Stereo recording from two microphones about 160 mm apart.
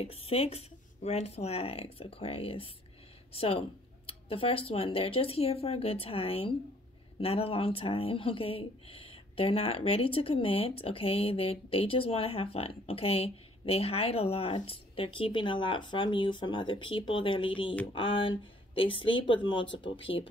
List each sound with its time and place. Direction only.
0.0 s speech: 40° left (ahead or behind)